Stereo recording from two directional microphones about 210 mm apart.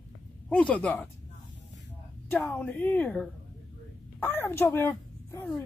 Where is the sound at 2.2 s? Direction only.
10° left (ahead or behind).